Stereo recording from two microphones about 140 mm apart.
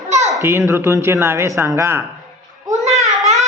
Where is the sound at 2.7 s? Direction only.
55° right (ahead or behind).